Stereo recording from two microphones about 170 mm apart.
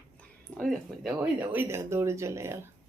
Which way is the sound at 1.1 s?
10° right (ahead or behind).